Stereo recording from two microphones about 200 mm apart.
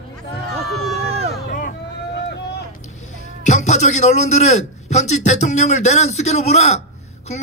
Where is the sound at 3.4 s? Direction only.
35° left (ahead or behind).